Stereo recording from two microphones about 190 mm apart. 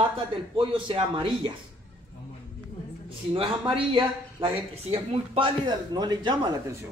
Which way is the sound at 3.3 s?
25° right (ahead or behind).